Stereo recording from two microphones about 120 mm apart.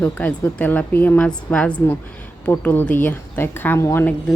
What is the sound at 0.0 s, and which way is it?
A woman's voice, 15° left (ahead or behind).